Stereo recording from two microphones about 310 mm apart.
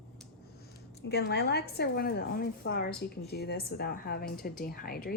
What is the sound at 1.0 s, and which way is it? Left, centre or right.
Speech, left.